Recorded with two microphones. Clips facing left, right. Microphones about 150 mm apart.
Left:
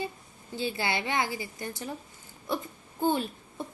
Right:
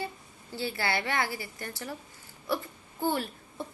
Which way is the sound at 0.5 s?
20° left (ahead or behind).